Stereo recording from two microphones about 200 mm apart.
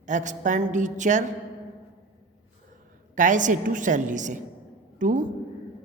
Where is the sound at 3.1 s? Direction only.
40° right (ahead or behind).